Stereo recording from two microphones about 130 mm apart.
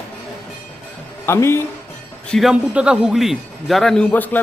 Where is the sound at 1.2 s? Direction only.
20° left (ahead or behind).